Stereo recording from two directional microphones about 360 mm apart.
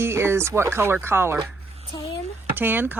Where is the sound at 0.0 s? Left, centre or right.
Centre.